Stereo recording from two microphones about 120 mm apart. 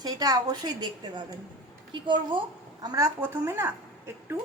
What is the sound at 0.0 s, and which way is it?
A woman's voice, 30° right (ahead or behind).